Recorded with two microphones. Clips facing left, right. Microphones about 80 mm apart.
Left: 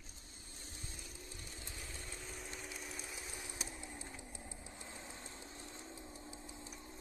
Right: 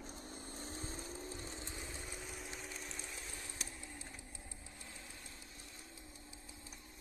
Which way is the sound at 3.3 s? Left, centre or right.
Centre.